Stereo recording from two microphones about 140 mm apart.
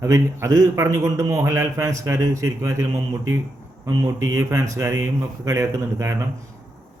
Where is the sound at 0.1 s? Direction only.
20° right (ahead or behind).